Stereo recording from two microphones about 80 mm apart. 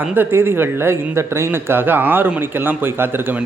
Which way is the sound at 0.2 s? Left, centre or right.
Right.